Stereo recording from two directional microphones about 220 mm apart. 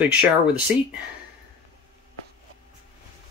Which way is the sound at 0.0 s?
5° right (ahead or behind).